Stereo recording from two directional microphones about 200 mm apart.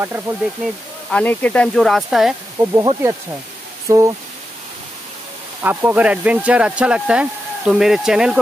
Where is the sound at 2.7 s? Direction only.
15° right (ahead or behind).